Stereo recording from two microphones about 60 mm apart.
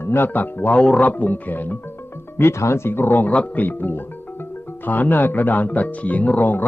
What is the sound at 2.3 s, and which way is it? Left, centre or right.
Speech, left.